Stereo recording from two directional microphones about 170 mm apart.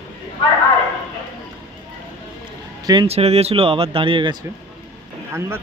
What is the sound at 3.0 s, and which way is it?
Speech, 40° right (ahead or behind).